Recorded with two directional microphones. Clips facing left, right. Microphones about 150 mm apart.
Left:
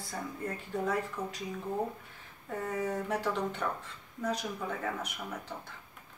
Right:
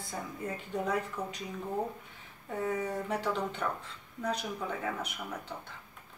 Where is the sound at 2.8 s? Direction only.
10° right (ahead or behind).